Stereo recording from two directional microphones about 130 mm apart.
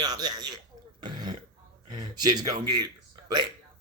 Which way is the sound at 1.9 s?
30° right (ahead or behind).